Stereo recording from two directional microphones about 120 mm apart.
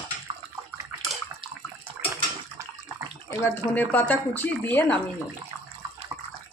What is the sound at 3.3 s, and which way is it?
Speech, 20° left (ahead or behind).